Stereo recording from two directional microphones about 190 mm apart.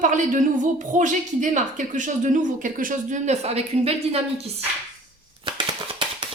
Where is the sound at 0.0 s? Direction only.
40° right (ahead or behind).